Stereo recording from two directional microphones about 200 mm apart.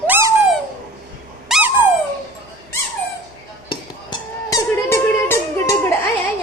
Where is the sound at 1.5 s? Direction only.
5° right (ahead or behind).